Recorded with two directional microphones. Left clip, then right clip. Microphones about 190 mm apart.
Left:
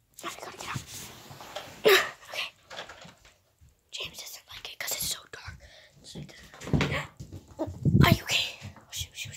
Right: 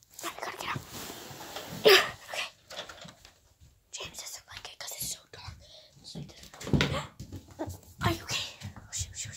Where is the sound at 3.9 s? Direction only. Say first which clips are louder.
Left 3 dB; 5° left (ahead or behind).